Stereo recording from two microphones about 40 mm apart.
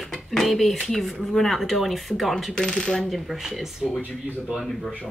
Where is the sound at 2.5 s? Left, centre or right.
Centre.